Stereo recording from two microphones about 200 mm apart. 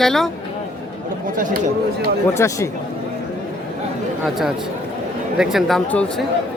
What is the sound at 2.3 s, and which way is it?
Speech, 15° left (ahead or behind).